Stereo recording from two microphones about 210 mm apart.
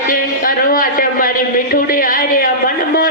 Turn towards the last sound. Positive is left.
turn(degrees=45)  # may be behind; listen again after turning